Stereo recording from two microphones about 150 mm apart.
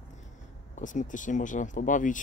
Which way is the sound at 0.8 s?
55° left (ahead or behind).